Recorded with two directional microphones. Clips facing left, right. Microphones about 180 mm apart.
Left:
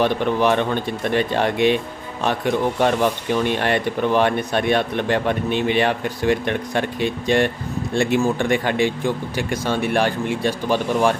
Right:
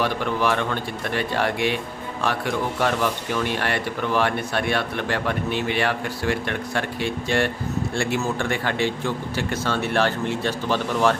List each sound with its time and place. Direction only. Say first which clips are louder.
0.0 s speech: left 5 dB; 20° left (ahead or behind)